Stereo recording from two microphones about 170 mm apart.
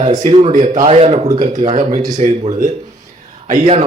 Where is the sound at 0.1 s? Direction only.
25° right (ahead or behind).